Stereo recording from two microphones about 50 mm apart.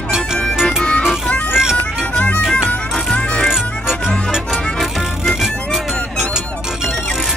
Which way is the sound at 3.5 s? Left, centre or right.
Centre.